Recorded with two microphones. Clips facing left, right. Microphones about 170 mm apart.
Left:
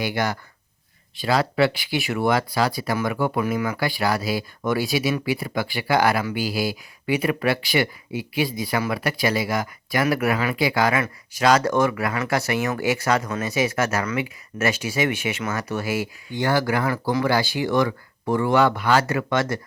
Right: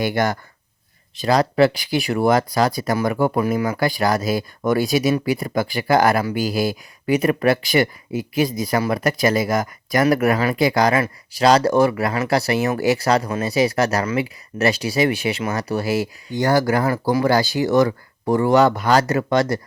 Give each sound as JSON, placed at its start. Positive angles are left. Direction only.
{"t": 0.0, "sound": "speech", "side_deg": -50}